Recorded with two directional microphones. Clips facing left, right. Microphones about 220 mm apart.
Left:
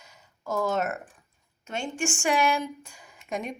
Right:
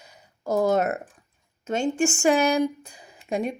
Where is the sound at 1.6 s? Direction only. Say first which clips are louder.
Right 8 dB; 40° right (ahead or behind).